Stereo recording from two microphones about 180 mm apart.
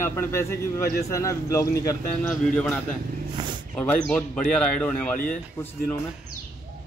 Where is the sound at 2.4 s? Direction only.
5° left (ahead or behind).